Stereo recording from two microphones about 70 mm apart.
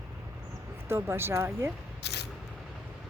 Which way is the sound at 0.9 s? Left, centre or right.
Right.